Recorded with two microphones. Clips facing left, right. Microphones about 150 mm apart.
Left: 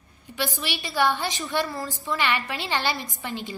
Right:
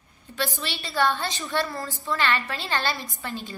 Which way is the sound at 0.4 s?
15° left (ahead or behind).